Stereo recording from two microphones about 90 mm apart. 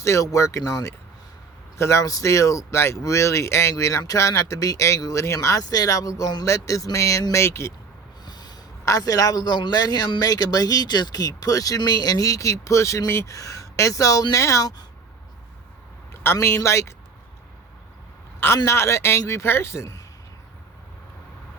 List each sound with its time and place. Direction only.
0.0 s speech: 35° left (ahead or behind)
8.2 s snort: 50° left (ahead or behind)
8.8 s a man's voice: 40° left (ahead or behind)
16.2 s speech: 30° left (ahead or behind)
18.3 s speech: 30° left (ahead or behind)